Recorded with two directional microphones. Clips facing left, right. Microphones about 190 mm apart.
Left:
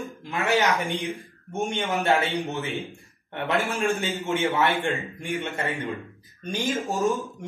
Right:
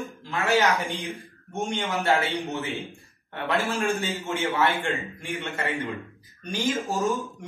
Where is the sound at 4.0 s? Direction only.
20° left (ahead or behind).